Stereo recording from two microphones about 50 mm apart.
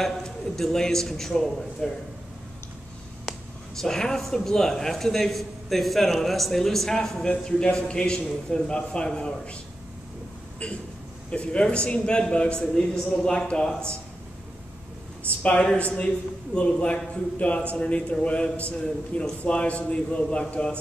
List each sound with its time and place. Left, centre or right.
0.0 s a man's voice: centre
3.8 s a man's voice: centre
7.2 s a man's voice: centre
11.2 s a man's voice: left
12.7 s a man's voice: centre
15.8 s a man's voice: left